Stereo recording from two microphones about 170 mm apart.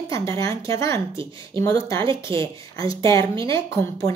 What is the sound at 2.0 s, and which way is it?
Speech, 30° right (ahead or behind).